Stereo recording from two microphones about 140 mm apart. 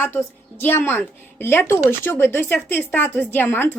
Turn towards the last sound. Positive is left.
turn(degrees=15)  # may be behind; listen again after turning